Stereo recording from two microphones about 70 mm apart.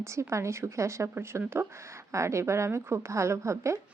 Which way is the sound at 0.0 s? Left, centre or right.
Right.